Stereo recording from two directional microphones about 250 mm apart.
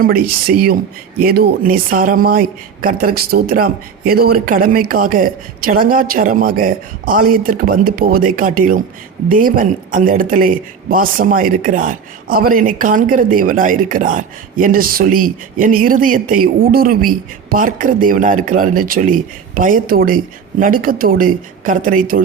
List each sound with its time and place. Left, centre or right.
0.5 s speech: right